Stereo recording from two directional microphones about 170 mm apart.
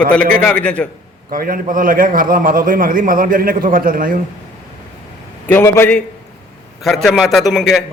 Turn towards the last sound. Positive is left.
turn(degrees=0)  # may be behind; listen again after turning